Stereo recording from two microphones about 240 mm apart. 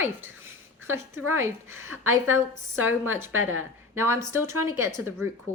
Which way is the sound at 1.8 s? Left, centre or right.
Right.